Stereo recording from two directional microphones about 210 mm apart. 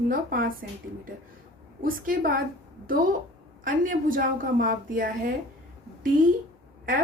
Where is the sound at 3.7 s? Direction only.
40° right (ahead or behind).